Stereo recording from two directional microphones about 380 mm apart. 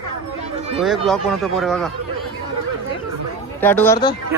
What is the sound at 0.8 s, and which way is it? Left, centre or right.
Speech, centre.